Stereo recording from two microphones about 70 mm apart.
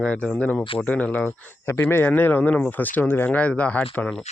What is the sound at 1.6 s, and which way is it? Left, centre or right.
Speech, left.